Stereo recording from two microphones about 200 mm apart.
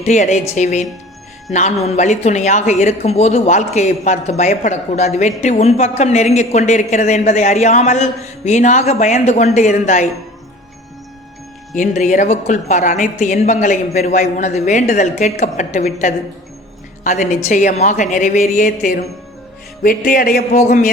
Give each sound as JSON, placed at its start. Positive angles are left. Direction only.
{"t": 0.0, "sound": "a woman's voice", "side_deg": 35}
{"t": 11.7, "sound": "a woman's voice", "side_deg": 35}